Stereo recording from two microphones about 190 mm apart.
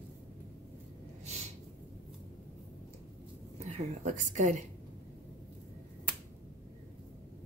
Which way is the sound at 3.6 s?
40° right (ahead or behind).